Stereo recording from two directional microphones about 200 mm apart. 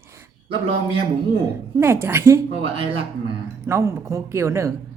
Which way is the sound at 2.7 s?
25° right (ahead or behind).